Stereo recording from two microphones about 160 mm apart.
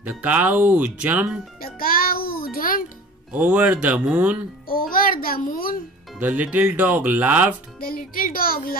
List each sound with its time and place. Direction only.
0.0 s speech: 10° right (ahead or behind)
1.6 s music: 65° left (ahead or behind)
3.3 s speech: 10° right (ahead or behind)
4.6 s a child's voice: 60° left (ahead or behind)
6.1 s speech: 10° right (ahead or behind)
7.8 s a child's voice: 65° left (ahead or behind)